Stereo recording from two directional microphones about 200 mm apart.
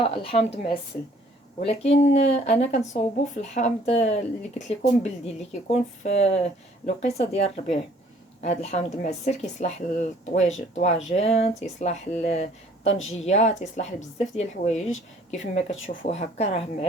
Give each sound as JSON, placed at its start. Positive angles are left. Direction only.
{"t": 0.0, "sound": "speech", "side_deg": 25}
{"t": 16.0, "sound": "speech", "side_deg": 30}